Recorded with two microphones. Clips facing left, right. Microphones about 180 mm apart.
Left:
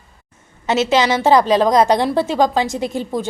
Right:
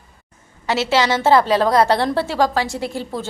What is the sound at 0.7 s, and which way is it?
A woman's voice, 20° left (ahead or behind).